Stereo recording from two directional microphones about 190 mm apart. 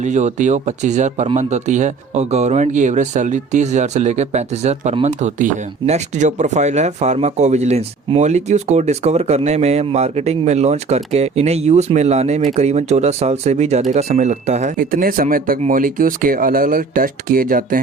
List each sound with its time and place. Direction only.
0.0 s speech: 40° right (ahead or behind)